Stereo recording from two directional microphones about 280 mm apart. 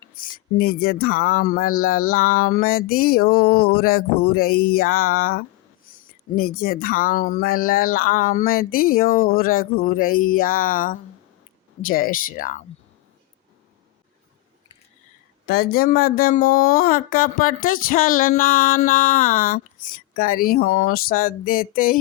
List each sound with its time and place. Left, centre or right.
0.1 s speech: left
15.4 s speech: left